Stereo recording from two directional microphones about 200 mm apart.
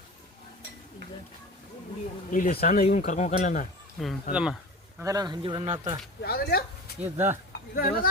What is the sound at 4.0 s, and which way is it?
Speech, centre (ahead or behind).